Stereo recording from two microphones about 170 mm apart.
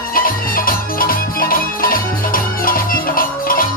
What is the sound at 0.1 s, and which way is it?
Music, 55° left (ahead or behind).